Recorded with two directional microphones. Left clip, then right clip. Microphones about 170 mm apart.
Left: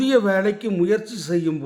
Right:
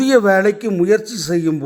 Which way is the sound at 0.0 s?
35° right (ahead or behind).